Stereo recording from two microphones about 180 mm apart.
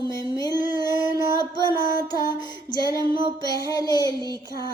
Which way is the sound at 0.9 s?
15° right (ahead or behind).